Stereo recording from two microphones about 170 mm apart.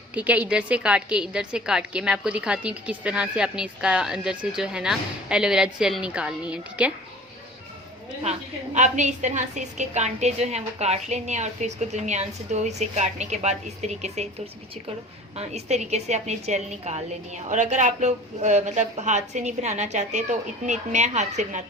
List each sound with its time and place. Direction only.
0.1 s a woman's voice: 10° right (ahead or behind)
8.2 s a woman's voice: 40° right (ahead or behind)
15.4 s a woman's voice: 40° right (ahead or behind)